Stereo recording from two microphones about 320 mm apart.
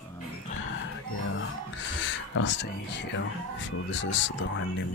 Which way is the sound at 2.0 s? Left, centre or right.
Left.